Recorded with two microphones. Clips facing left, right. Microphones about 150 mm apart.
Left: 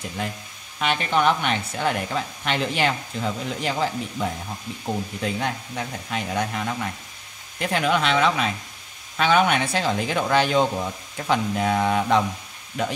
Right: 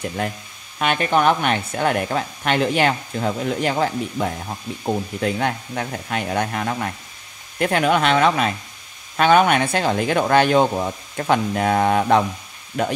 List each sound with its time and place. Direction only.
0.7 s speech: 55° right (ahead or behind)